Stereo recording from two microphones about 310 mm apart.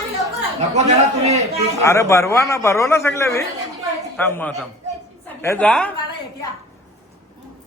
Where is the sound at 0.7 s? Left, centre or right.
Right.